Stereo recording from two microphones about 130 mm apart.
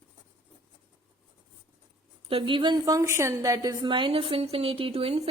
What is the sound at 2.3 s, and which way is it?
Speech, 40° right (ahead or behind).